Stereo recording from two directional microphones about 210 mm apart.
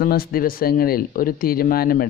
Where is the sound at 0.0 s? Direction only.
45° left (ahead or behind).